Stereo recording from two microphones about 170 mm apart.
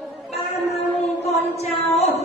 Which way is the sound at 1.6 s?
40° left (ahead or behind).